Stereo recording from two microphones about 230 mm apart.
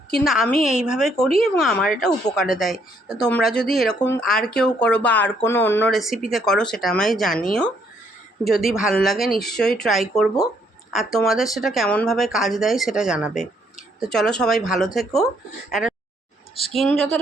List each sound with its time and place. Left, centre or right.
0.1 s speech: centre
0.5 s a woman's voice: left
0.8 s speech: centre
8.4 s speech: centre